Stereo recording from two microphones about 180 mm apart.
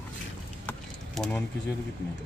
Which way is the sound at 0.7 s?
5° left (ahead or behind).